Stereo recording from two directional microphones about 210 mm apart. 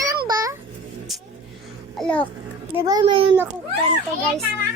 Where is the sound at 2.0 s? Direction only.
5° left (ahead or behind).